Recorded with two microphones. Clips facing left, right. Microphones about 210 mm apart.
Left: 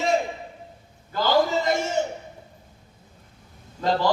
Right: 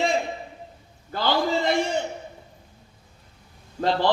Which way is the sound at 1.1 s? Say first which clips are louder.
Left 2 dB; 45° left (ahead or behind).